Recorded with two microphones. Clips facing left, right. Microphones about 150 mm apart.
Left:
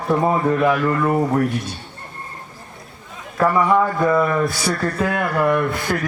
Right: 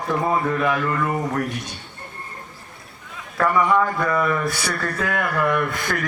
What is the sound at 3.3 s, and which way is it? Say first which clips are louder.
Speech: left 2 dB; 25° left (ahead or behind).